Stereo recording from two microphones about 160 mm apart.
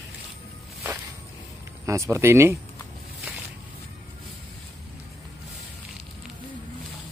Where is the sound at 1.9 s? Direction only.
15° right (ahead or behind).